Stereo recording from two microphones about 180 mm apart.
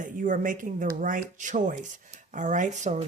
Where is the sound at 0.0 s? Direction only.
45° right (ahead or behind).